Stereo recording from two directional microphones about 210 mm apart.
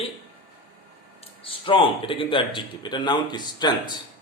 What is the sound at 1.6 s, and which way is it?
Speech, 25° left (ahead or behind).